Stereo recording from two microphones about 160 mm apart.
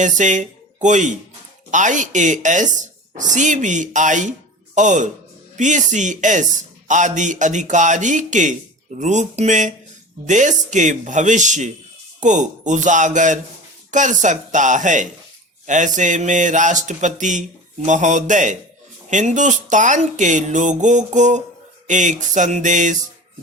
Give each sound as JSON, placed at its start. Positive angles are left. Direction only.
{"t": 0.0, "sound": "speech", "side_deg": -50}